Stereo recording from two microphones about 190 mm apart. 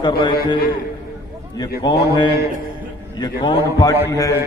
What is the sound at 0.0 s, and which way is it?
Speech, 25° left (ahead or behind).